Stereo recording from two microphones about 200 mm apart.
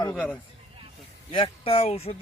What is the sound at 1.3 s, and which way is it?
Speech, 25° left (ahead or behind).